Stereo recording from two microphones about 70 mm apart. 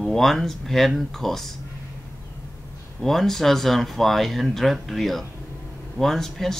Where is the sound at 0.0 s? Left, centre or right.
Centre.